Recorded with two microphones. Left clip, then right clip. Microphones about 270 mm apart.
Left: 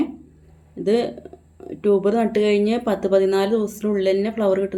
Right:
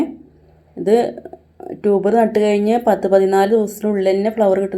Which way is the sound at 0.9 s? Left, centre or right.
Centre.